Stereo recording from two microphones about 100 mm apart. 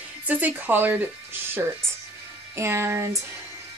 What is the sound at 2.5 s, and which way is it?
Speech, 25° right (ahead or behind).